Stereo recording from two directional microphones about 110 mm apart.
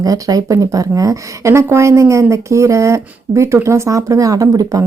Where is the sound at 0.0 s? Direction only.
35° right (ahead or behind).